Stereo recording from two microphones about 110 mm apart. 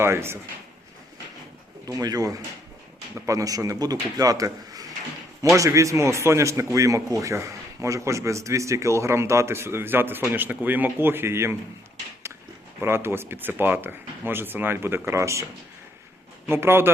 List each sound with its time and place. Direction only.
0.0 s a man's voice: 20° right (ahead or behind)
1.9 s a man's voice: 35° right (ahead or behind)
12.8 s a man's voice: 20° right (ahead or behind)
16.5 s a man's voice: 20° right (ahead or behind)